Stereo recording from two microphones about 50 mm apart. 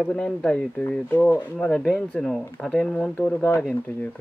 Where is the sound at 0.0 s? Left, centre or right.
Centre.